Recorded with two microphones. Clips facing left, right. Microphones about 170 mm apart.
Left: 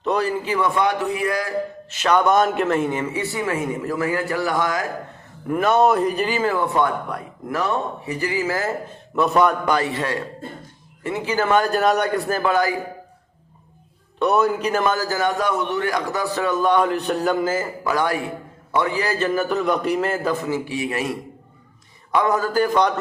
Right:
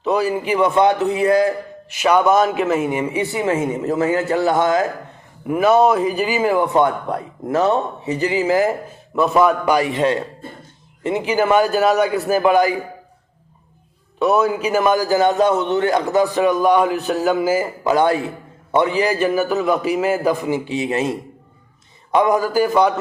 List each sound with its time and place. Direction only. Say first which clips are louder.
0.0 s a man's voice: right 3 dB; 5° right (ahead or behind); by 1.5 s 25° right (ahead or behind)
1.9 s a man's voice: right 3 dB; 10° right (ahead or behind)
5.5 s a man's voice: right 3 dB; 5° right (ahead or behind)
9.1 s a man's voice: right 3 dB; centre (ahead or behind); by 12.7 s 15° right (ahead or behind)
14.2 s a man's voice: right 2 dB; centre (ahead or behind)
17.8 s a man's voice: right 6 dB; 25° right (ahead or behind); by 23.0 s 5° right (ahead or behind)